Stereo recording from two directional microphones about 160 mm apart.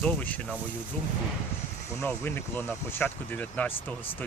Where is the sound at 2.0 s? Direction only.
10° left (ahead or behind).